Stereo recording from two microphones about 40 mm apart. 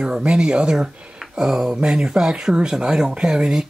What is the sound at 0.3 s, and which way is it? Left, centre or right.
Speech, right.